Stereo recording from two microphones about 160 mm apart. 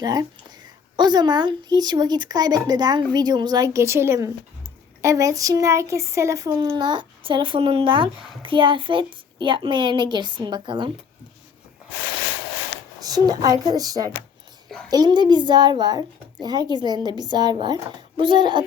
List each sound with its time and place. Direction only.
0.0 s speech: 25° right (ahead or behind)
6.7 s a woman's voice: 30° right (ahead or behind)
13.0 s speech: 25° right (ahead or behind)